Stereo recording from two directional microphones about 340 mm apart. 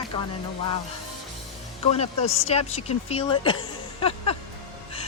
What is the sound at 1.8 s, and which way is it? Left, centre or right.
Speech, centre.